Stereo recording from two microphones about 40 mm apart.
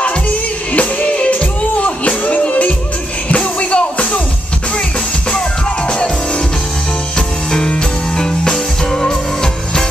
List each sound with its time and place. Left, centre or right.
0.7 s music: left
7.2 s music: left